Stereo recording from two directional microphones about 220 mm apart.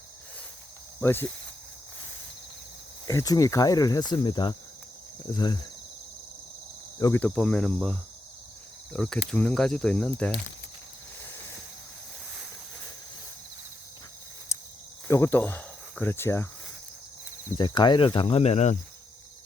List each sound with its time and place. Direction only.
1.0 s speech: 10° left (ahead or behind)
3.1 s speech: 15° left (ahead or behind)
7.0 s speech: 10° left (ahead or behind)
14.5 s cricket: 15° left (ahead or behind)
15.0 s speech: 10° left (ahead or behind)
17.6 s speech: 20° left (ahead or behind)